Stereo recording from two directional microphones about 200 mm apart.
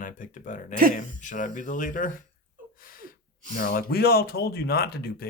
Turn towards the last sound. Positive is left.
turn(degrees=50)  # may be behind; listen again after turning